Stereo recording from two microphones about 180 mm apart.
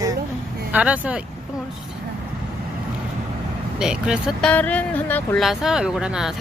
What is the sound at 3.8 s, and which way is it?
Speech, 5° right (ahead or behind).